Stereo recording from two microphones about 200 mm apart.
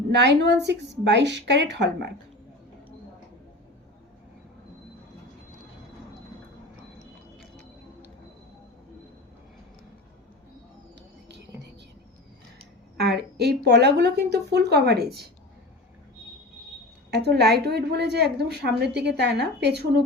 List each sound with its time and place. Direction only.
0.1 s a woman's voice: 60° right (ahead or behind)
13.0 s a woman's voice: 55° right (ahead or behind)
17.2 s a woman's voice: 55° right (ahead or behind)